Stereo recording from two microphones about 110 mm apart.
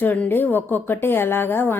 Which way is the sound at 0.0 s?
15° left (ahead or behind).